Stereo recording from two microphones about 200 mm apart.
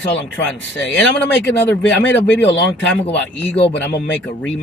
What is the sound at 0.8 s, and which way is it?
Speech, centre (ahead or behind).